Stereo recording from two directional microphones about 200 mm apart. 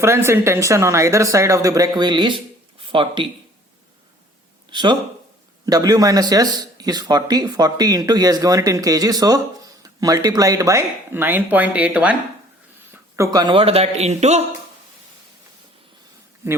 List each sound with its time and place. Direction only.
0.0 s speech: 15° right (ahead or behind)
4.7 s a man's voice: 20° right (ahead or behind)